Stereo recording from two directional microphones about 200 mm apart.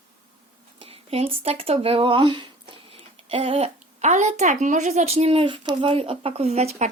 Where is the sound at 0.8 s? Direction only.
30° right (ahead or behind).